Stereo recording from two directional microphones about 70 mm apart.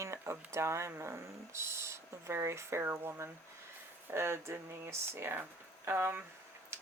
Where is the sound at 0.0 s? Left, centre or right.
Right.